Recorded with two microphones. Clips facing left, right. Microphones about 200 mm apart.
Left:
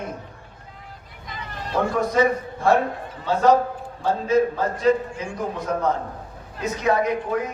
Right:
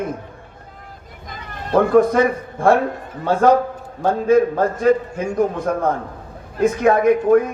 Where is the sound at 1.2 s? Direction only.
50° right (ahead or behind).